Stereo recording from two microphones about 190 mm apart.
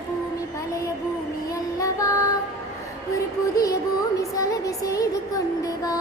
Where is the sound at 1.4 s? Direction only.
20° left (ahead or behind).